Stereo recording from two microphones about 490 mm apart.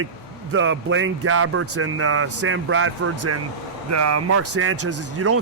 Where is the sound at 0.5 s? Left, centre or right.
Right.